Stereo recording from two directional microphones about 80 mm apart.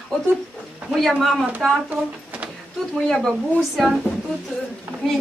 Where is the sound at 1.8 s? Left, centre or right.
Centre.